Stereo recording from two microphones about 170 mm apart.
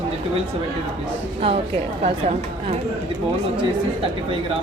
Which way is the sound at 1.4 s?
35° right (ahead or behind).